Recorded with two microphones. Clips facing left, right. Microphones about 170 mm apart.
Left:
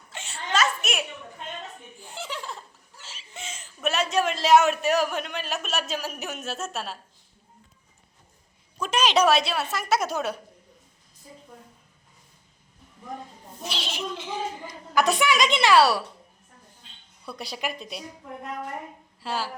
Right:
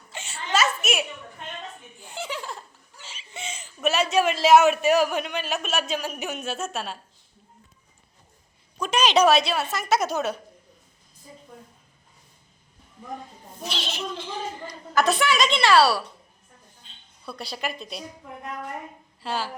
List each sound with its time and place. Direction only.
0.1 s a sound: centre (ahead or behind)
8.8 s speech: 5° left (ahead or behind)
13.7 s a woman's voice: 5° left (ahead or behind)
17.3 s a woman's voice: 15° left (ahead or behind)
19.2 s speech: 5° left (ahead or behind)